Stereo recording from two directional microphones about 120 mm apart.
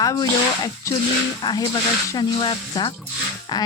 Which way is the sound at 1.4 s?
35° left (ahead or behind).